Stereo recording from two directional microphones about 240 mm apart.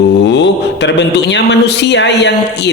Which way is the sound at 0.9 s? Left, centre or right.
Left.